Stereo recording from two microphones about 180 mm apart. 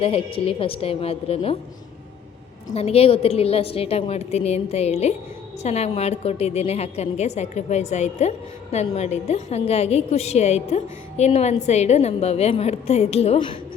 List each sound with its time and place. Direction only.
0.0 s a woman's voice: 35° left (ahead or behind)
2.7 s a woman's voice: 35° left (ahead or behind)